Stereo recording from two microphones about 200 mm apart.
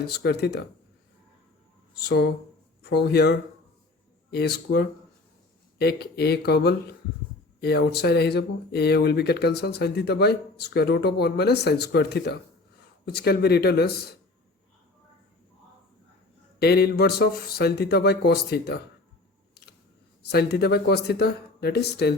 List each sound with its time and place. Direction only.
0.1 s speech: 55° left (ahead or behind)
2.0 s speech: 55° left (ahead or behind)
16.6 s speech: 55° left (ahead or behind)
20.2 s speech: 55° left (ahead or behind)